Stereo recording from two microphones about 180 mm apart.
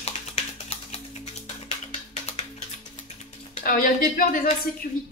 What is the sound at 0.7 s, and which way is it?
Music, 35° left (ahead or behind).